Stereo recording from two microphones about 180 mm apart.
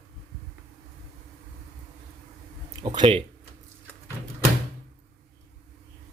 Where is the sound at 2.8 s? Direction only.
30° right (ahead or behind).